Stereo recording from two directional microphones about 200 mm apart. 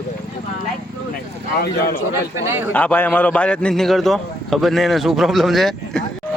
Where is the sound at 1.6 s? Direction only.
50° left (ahead or behind).